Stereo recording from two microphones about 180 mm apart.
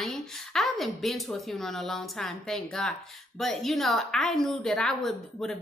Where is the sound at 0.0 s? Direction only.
Centre (ahead or behind).